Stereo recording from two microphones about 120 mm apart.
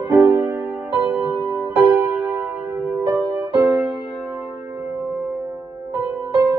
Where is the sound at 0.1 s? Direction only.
20° right (ahead or behind).